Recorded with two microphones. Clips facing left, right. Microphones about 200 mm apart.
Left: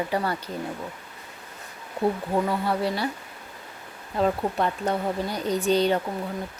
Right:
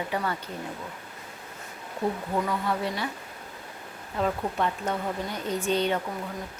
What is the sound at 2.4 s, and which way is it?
Speech, 35° left (ahead or behind).